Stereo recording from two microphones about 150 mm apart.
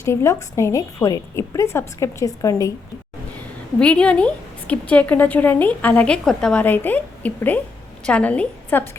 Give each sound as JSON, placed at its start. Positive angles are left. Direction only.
{"t": 0.0, "sound": "a woman's voice", "side_deg": 20}
{"t": 3.8, "sound": "a woman's voice", "side_deg": 5}